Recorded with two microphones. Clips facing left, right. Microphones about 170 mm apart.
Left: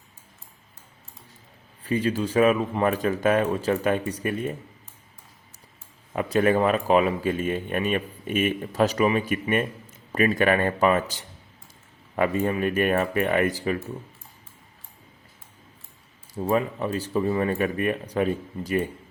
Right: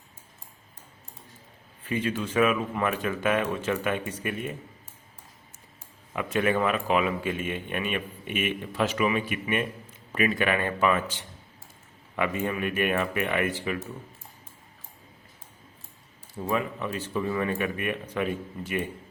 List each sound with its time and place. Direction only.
1.8 s speech: 35° left (ahead or behind)
6.1 s speech: 35° left (ahead or behind)
16.3 s speech: 35° left (ahead or behind)